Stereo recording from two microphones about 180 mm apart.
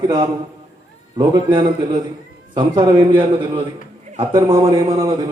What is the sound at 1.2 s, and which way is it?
A man's voice, 25° right (ahead or behind).